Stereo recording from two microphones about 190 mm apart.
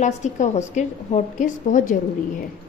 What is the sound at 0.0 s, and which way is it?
A woman's voice, 40° left (ahead or behind).